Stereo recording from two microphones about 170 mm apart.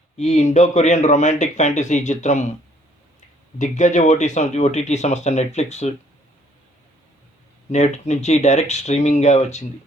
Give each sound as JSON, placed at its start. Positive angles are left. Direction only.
{"t": 0.2, "sound": "speech", "side_deg": 45}
{"t": 3.6, "sound": "speech", "side_deg": 45}
{"t": 7.7, "sound": "speech", "side_deg": 40}